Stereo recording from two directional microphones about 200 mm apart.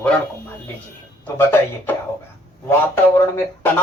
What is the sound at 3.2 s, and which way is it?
Music, 10° left (ahead or behind).